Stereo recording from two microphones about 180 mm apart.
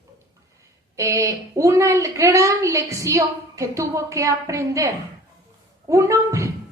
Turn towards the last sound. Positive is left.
turn(degrees=-15)  # may be behind; listen again after turning